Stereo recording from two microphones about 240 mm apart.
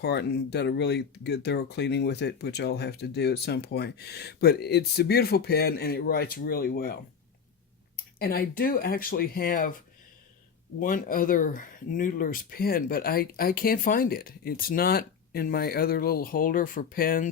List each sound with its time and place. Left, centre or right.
0.0 s speech: left
8.2 s speech: left
10.8 s speech: left